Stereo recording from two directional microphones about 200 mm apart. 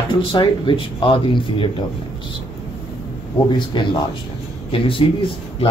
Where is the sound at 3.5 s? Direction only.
25° left (ahead or behind).